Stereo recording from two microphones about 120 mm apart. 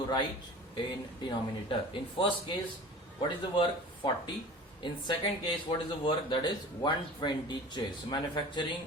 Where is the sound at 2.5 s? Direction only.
40° left (ahead or behind).